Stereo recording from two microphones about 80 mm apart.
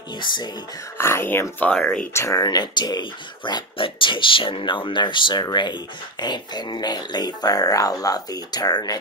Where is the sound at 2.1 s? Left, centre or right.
Left.